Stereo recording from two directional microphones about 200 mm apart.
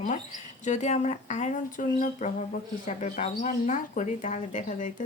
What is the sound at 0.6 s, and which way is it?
Speech, 35° left (ahead or behind).